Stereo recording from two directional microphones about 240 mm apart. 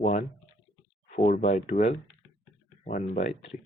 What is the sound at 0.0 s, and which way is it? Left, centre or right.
Speech, left.